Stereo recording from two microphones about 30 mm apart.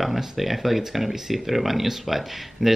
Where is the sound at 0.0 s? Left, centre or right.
Centre.